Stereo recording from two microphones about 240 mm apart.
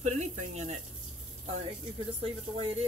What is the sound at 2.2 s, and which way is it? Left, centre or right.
Speech, right.